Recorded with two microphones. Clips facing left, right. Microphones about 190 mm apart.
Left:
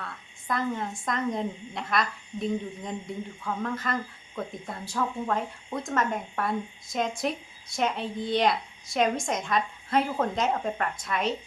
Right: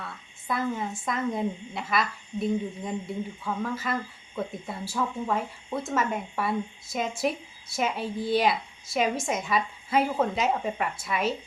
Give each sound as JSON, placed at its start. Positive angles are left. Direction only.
{"t": 0.0, "sound": "speech", "side_deg": -5}